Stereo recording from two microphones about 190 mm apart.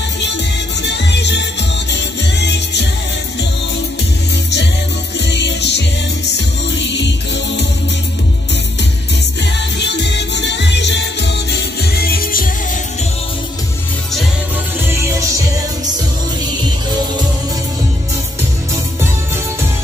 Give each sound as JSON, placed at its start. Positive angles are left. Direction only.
{"t": 0.8, "sound": "music", "side_deg": 65}
{"t": 5.2, "sound": "music", "side_deg": 65}
{"t": 9.4, "sound": "music", "side_deg": 65}
{"t": 11.8, "sound": "music", "side_deg": 55}
{"t": 14.9, "sound": "music", "side_deg": -15}